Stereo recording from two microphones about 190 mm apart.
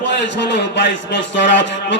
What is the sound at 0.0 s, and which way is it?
Speech, 65° left (ahead or behind).